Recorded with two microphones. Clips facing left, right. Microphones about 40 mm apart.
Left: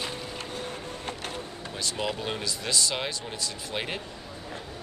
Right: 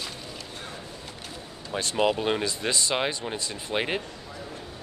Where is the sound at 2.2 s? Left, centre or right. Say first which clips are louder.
Right 6 dB; right.